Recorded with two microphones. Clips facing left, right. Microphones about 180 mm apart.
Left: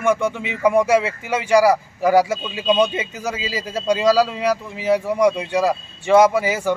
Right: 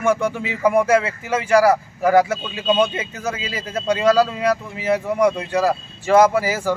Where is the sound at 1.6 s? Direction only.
15° left (ahead or behind).